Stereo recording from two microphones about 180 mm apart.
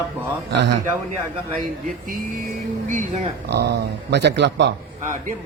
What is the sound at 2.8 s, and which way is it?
Speech, 40° right (ahead or behind).